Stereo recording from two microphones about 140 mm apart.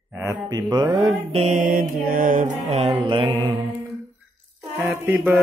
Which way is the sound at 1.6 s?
85° right.